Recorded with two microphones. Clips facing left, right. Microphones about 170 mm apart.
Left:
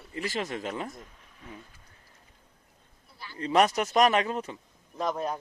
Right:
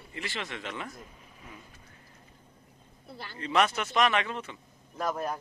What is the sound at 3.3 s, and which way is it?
Speech, 35° left (ahead or behind).